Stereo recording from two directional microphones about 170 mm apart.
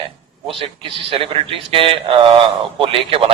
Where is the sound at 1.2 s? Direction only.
30° right (ahead or behind).